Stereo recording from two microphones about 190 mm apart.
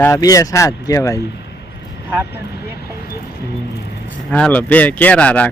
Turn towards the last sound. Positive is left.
turn(degrees=5)  # may be behind; listen again after turning